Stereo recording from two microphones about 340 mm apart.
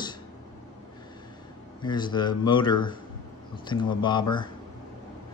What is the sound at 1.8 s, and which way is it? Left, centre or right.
Speech, centre.